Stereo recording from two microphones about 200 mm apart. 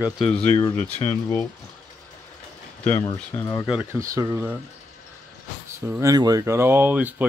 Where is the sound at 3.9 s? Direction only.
15° right (ahead or behind).